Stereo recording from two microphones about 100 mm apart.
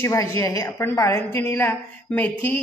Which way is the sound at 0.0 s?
30° left (ahead or behind).